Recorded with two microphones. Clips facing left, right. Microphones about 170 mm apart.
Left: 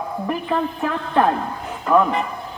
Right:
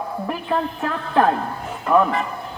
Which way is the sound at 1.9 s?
Centre (ahead or behind).